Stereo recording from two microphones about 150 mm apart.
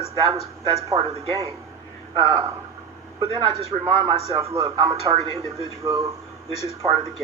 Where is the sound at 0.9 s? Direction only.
40° right (ahead or behind).